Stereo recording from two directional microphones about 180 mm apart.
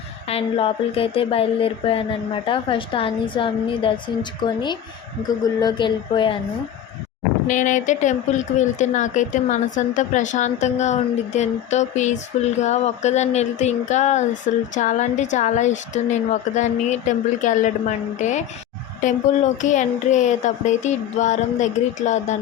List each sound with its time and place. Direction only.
0.3 s speech: 30° left (ahead or behind)
7.4 s a woman's voice: 45° left (ahead or behind)